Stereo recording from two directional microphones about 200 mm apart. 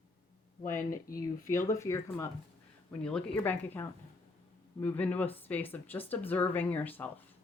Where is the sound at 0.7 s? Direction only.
15° left (ahead or behind).